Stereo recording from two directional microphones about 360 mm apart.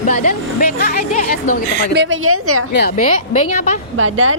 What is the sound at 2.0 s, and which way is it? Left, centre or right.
Speech, right.